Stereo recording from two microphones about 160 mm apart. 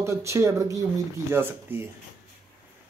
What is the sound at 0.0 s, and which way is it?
A man's voice, 15° right (ahead or behind).